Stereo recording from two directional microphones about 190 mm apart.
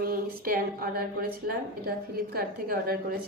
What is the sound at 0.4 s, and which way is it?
A woman's voice, 50° right (ahead or behind).